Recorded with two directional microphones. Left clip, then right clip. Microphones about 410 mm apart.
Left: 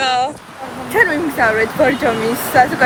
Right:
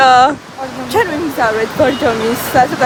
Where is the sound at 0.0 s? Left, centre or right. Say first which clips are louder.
Right 9 dB; right.